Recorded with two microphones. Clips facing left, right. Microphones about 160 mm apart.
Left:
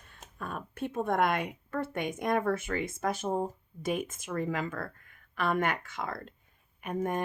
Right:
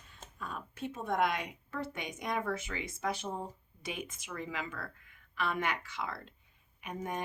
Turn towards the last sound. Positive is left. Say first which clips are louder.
# left 7 dB
turn(degrees=50)  # may be behind; listen again after turning